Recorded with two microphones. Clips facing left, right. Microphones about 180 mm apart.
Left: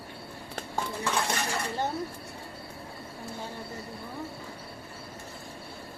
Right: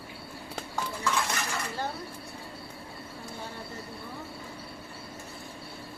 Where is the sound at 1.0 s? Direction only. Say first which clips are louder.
Even; 30° left (ahead or behind).